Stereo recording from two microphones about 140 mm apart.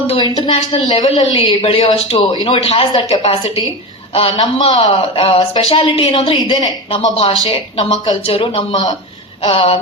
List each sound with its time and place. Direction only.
0.1 s a woman's voice: 40° left (ahead or behind)